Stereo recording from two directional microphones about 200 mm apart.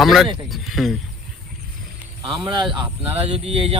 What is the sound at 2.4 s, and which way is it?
Speech, 20° right (ahead or behind).